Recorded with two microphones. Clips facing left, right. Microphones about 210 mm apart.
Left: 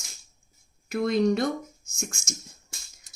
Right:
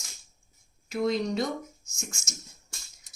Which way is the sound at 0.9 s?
55° left (ahead or behind).